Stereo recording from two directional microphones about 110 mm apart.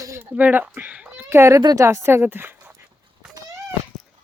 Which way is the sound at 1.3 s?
25° right (ahead or behind).